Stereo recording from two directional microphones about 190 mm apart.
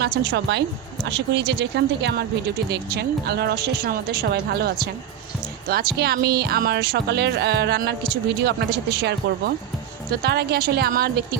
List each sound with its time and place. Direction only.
0.0 s speech: 60° right (ahead or behind)